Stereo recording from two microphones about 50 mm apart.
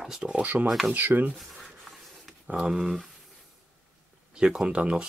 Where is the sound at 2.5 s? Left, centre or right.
Centre.